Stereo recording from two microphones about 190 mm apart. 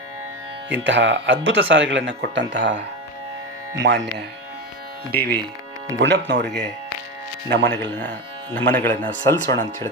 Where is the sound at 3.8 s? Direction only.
60° right (ahead or behind).